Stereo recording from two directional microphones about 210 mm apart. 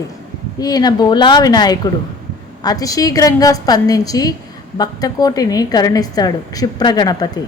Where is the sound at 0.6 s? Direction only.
20° left (ahead or behind).